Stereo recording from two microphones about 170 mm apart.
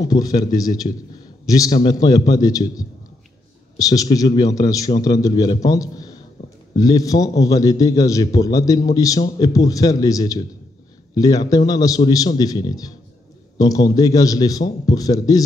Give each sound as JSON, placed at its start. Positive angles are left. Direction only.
{"t": 0.0, "sound": "a man's voice", "side_deg": 20}